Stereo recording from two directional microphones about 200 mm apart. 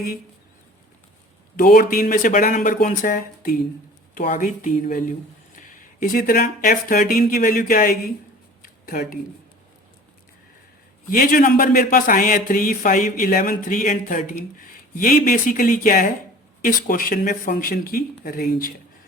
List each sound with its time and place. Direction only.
1.5 s speech: 45° left (ahead or behind)
8.6 s a sound: 45° left (ahead or behind)
11.1 s speech: 45° left (ahead or behind)